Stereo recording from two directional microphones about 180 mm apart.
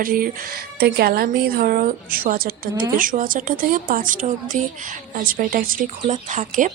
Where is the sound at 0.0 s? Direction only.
50° right (ahead or behind).